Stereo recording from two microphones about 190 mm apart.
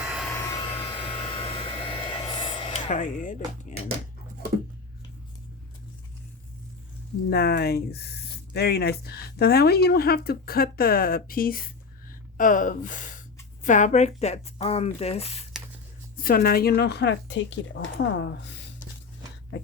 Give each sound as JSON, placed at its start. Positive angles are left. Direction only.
{"t": 0.0, "sound": "vehicle", "side_deg": 0}
{"t": 0.3, "sound": "hair dryer", "side_deg": 20}
{"t": 2.9, "sound": "speech", "side_deg": 45}
{"t": 7.3, "sound": "speech", "side_deg": 55}
{"t": 16.1, "sound": "speech", "side_deg": 50}